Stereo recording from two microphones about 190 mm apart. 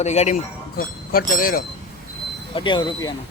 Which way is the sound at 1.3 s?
50° left (ahead or behind).